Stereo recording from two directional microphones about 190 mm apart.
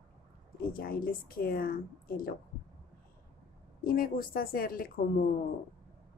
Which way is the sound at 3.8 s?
50° left (ahead or behind).